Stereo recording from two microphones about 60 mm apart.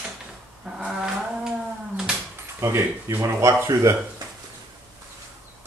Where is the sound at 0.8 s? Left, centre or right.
Centre.